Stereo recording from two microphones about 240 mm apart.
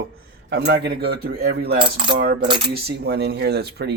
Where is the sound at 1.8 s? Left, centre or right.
Right.